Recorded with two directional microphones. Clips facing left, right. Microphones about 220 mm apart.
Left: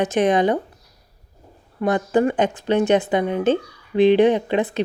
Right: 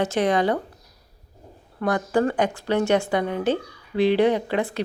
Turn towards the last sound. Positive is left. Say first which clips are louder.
# left 3 dB
turn(degrees=20)  # may be behind; listen again after turning